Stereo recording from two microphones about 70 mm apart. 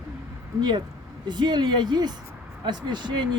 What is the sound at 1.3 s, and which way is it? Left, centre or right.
Speech, right.